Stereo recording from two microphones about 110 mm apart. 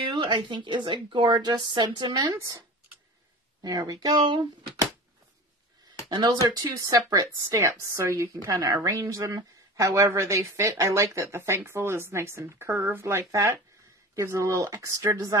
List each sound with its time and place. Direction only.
0.1 s speech: 45° right (ahead or behind)
3.6 s speech: 35° right (ahead or behind)
6.0 s a woman's voice: 35° right (ahead or behind)